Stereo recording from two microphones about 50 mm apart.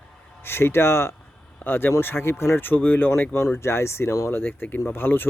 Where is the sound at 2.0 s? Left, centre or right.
Left.